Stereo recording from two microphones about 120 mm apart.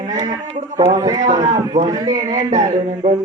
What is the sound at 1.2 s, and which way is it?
Speech, 90° right.